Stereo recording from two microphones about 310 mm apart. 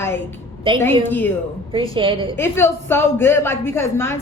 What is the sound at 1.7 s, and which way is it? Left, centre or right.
Speech, centre.